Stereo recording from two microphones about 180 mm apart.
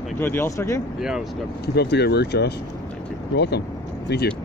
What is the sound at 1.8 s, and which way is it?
Speech, 65° left (ahead or behind).